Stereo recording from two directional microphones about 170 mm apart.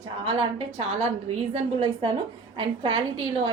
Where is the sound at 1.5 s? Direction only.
30° right (ahead or behind).